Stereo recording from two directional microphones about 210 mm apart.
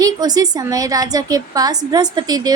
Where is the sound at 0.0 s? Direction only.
20° right (ahead or behind).